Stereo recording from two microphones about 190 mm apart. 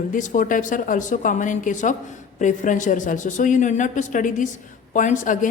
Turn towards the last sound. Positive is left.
turn(degrees=40)  # may be behind; listen again after turning